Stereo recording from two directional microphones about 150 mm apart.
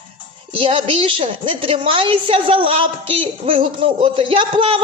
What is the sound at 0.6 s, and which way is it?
A woman's voice, 35° right (ahead or behind).